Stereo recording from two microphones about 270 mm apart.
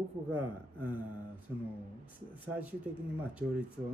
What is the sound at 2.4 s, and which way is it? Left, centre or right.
Speech, centre.